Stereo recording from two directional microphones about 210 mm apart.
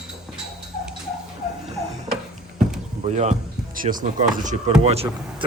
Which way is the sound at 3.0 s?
35° right (ahead or behind).